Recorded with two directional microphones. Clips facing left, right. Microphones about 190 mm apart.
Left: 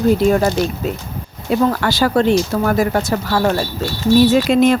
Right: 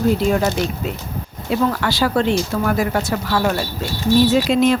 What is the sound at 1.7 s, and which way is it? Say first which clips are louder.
Speech: left 3 dB; 45° left (ahead or behind).